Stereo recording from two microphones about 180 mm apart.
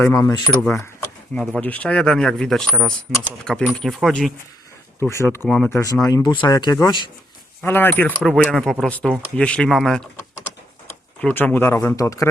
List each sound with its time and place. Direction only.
0.1 s speech: 15° left (ahead or behind); by 4.3 s centre (ahead or behind)
4.9 s speech: 15° left (ahead or behind)
5.5 s speech: centre (ahead or behind)
5.7 s speech: 20° left (ahead or behind)
7.6 s speech: 10° left (ahead or behind)
11.2 s speech: 5° left (ahead or behind)